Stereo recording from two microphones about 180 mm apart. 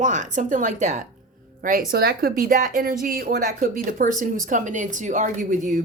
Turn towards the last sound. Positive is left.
turn(degrees=-45)  # may be behind; listen again after turning